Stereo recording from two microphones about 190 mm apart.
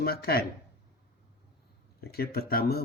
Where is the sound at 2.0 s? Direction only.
55° left (ahead or behind).